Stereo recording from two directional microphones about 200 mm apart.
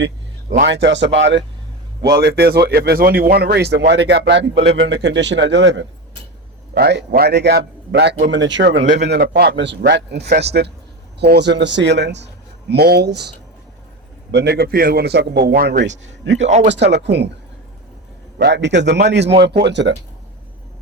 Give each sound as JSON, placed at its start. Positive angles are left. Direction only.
{"t": 0.6, "sound": "speech", "side_deg": -60}
{"t": 2.1, "sound": "speech", "side_deg": -55}
{"t": 15.9, "sound": "speech", "side_deg": -65}
{"t": 18.3, "sound": "speech", "side_deg": -55}